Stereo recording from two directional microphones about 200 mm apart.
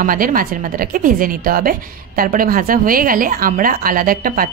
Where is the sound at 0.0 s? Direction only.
45° right (ahead or behind).